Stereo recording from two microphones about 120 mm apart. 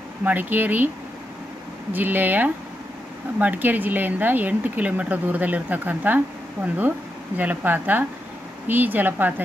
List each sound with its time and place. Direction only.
0.2 s speech: 15° right (ahead or behind)
1.9 s speech: 15° right (ahead or behind)